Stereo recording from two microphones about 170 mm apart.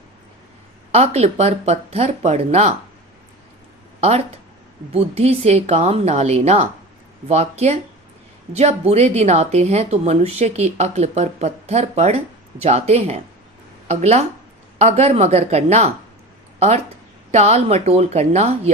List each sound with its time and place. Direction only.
0.9 s speech: 40° right (ahead or behind)
4.9 s speech: 35° right (ahead or behind)